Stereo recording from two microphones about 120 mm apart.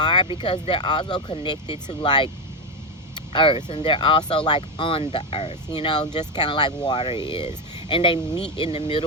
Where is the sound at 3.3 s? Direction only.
45° left (ahead or behind).